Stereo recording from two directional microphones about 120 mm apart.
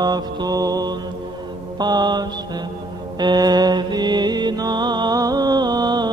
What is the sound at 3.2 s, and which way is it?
Music, 35° right (ahead or behind).